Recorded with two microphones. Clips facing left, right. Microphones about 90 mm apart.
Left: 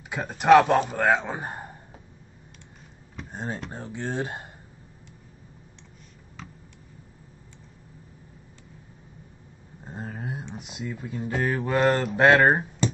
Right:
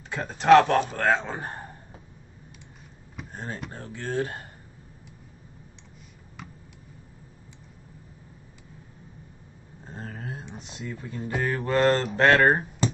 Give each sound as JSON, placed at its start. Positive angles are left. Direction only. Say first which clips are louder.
{"t": 0.1, "sound": "speech", "louder": "even", "side_deg": 10}
{"t": 3.3, "sound": "speech", "louder": "left 3 dB", "side_deg": 20}
{"t": 9.8, "sound": "a sound", "louder": "left 2 dB", "side_deg": 15}
{"t": 10.6, "sound": "speech", "louder": "left 2 dB", "side_deg": 10}